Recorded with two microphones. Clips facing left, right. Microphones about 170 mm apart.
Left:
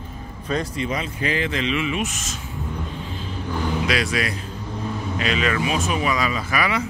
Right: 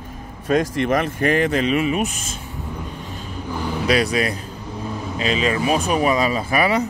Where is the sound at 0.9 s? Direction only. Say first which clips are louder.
Right 8 dB; 50° right (ahead or behind).